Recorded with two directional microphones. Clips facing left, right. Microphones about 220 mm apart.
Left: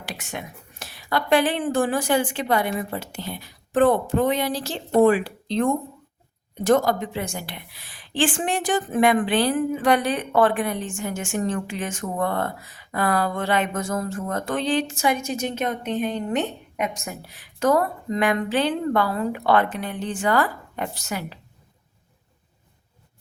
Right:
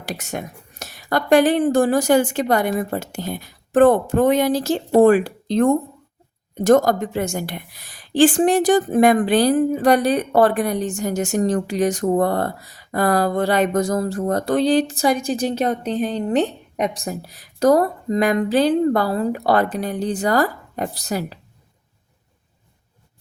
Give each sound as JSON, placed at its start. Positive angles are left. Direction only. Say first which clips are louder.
{"t": 0.0, "sound": "a woman's voice", "louder": "right 6 dB", "side_deg": -40}